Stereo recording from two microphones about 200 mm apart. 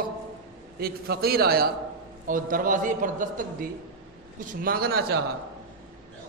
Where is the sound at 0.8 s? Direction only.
50° right (ahead or behind).